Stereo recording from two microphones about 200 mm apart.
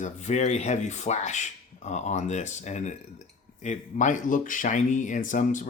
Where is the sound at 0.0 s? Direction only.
35° left (ahead or behind).